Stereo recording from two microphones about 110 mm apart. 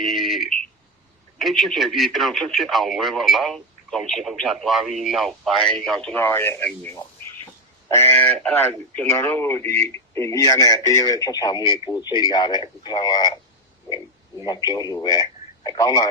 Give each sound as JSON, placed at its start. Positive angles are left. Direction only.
{"t": 0.0, "sound": "a sound", "side_deg": 0}
{"t": 1.4, "sound": "speech", "side_deg": 0}
{"t": 6.1, "sound": "speech", "side_deg": 20}
{"t": 14.4, "sound": "speech", "side_deg": 40}